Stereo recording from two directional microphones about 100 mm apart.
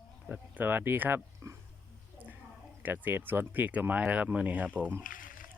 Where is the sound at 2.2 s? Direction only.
15° right (ahead or behind).